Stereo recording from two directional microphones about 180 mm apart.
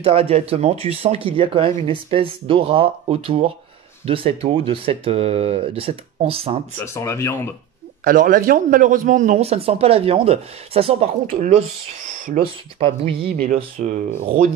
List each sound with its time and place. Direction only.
0.0 s a man's voice: 35° right (ahead or behind)
6.8 s speech: 15° left (ahead or behind)
8.0 s a man's voice: 50° right (ahead or behind); by 13.3 s 30° right (ahead or behind)
13.7 s speech: 45° right (ahead or behind)